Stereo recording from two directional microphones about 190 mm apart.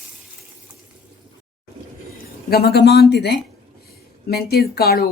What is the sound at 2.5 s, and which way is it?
Speech, 55° left (ahead or behind).